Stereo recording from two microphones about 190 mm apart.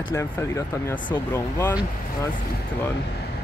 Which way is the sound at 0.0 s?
15° left (ahead or behind).